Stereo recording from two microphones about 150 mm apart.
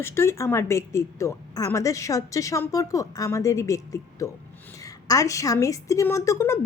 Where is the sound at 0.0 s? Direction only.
15° left (ahead or behind).